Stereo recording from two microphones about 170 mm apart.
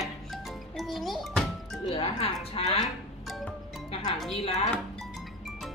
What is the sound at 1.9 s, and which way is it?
Speech, 35° left (ahead or behind).